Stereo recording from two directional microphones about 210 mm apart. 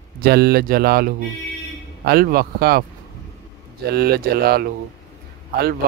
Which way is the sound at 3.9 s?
45° right (ahead or behind).